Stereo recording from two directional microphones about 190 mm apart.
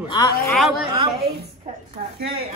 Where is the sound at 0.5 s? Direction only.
Centre (ahead or behind).